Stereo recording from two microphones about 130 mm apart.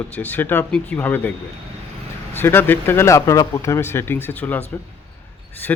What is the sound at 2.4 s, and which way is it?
A man's voice, 15° left (ahead or behind).